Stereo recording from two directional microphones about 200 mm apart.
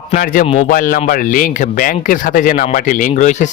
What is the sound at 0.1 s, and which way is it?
A man's voice, 45° left (ahead or behind).